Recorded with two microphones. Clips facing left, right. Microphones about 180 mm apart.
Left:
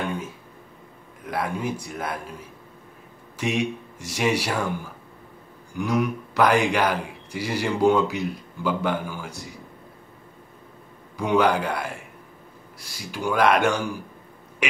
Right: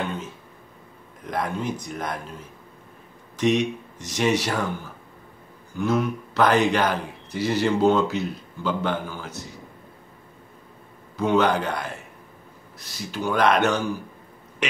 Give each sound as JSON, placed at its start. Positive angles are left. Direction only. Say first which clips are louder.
{"t": 1.2, "sound": "speech", "louder": "even", "side_deg": 5}
{"t": 3.3, "sound": "speech", "louder": "right 4 dB", "side_deg": 10}
{"t": 5.7, "sound": "speech", "louder": "right 1 dB", "side_deg": 15}
{"t": 11.1, "sound": "speech", "louder": "even", "side_deg": 10}
{"t": 14.6, "sound": "a sound", "louder": "even", "side_deg": 10}